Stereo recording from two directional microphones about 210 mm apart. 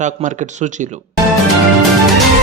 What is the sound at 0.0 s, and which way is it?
Speech, 35° right (ahead or behind).